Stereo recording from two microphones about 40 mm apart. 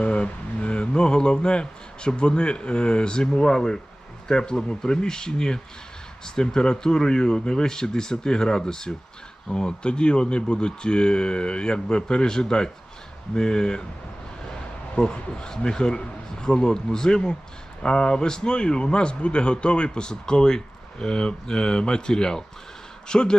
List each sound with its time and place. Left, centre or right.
0.0 s speech: left
14.9 s speech: left